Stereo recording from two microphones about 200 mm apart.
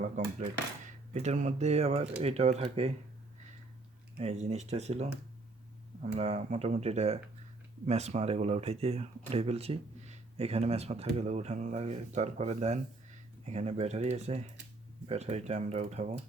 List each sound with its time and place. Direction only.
1.1 s speech: 35° right (ahead or behind)
4.2 s speech: 30° right (ahead or behind)